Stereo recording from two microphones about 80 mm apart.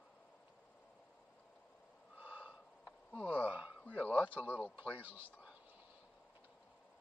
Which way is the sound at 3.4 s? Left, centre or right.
Centre.